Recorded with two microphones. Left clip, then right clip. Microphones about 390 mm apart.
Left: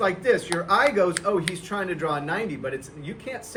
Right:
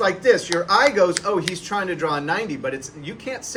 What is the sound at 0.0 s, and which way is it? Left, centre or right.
Speech, centre.